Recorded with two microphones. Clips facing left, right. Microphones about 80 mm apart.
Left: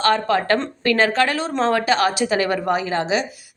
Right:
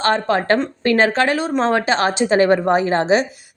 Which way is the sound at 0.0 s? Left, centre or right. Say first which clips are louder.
Right 1 dB; right.